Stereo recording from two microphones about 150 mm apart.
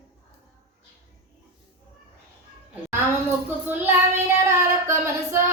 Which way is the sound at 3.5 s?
15° right (ahead or behind).